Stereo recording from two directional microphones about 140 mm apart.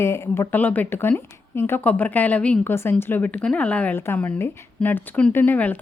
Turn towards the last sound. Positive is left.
turn(degrees=10)  # may be behind; listen again after turning